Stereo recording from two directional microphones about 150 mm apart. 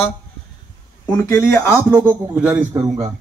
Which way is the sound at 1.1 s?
20° left (ahead or behind).